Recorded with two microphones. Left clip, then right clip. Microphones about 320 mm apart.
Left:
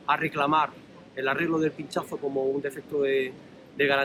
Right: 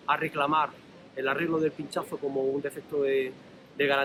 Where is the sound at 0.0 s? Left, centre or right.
Centre.